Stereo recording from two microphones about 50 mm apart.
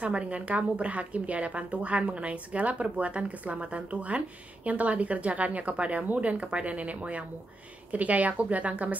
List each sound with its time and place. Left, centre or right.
0.0 s a woman's voice: right